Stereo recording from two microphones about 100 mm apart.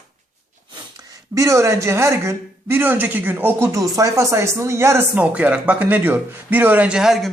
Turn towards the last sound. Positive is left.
turn(degrees=-5)  # may be behind; listen again after turning